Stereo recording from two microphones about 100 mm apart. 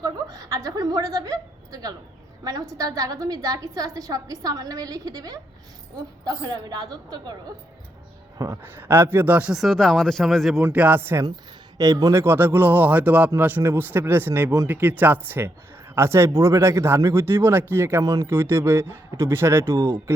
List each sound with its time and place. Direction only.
0.0 s a woman's voice: 40° right (ahead or behind)
8.6 s speech: 20° right (ahead or behind)
9.5 s speech: centre (ahead or behind)
10.6 s speech: 20° right (ahead or behind)
11.8 s a woman's voice: 40° right (ahead or behind)
12.1 s speech: 20° right (ahead or behind)
18.0 s a woman's voice: 40° right (ahead or behind)
18.3 s speech: 25° right (ahead or behind)